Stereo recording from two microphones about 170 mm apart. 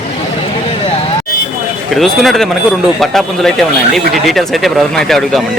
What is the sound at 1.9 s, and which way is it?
Speech, centre (ahead or behind).